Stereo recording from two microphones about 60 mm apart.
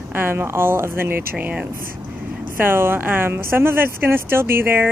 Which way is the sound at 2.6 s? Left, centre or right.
Right.